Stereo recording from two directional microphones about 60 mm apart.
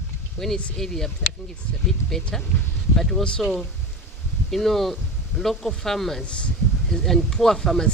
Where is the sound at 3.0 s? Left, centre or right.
Centre.